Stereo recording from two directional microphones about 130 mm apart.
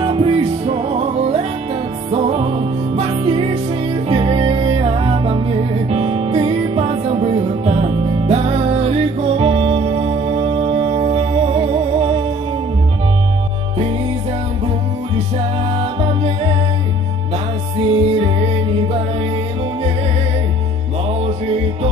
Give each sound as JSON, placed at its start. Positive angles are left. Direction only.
{"t": 0.0, "sound": "music", "side_deg": -45}
{"t": 15.8, "sound": "music", "side_deg": -50}
{"t": 17.7, "sound": "music", "side_deg": -50}